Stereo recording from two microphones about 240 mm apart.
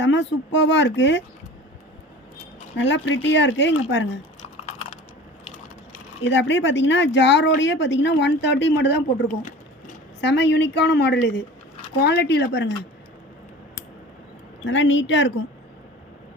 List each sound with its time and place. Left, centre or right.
0.0 s a woman's voice: left
2.7 s a woman's voice: left
6.2 s a woman's voice: left
14.6 s a woman's voice: left